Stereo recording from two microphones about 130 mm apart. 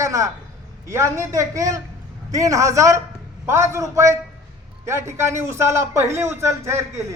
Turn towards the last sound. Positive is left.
turn(degrees=-20)  # may be behind; listen again after turning